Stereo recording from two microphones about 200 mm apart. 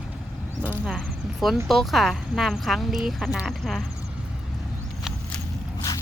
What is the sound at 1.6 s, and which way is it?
Speech, centre (ahead or behind).